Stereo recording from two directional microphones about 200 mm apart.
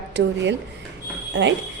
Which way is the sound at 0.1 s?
60° right (ahead or behind).